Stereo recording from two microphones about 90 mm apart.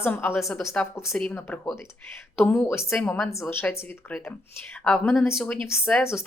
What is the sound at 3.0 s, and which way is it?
A woman's voice, 5° left (ahead or behind).